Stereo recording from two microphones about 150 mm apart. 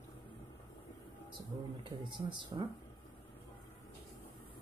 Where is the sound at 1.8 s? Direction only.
30° right (ahead or behind).